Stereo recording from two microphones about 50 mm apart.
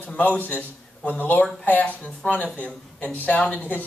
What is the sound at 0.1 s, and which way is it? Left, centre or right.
Speech, left.